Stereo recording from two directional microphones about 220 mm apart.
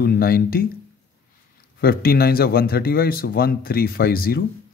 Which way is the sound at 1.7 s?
45° left (ahead or behind).